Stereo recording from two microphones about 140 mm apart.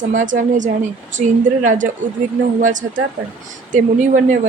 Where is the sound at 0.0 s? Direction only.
60° right (ahead or behind).